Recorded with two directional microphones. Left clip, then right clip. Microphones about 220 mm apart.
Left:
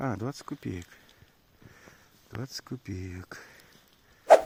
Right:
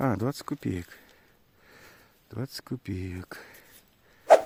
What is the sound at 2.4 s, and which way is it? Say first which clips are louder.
Speech: right 3 dB; 35° right (ahead or behind).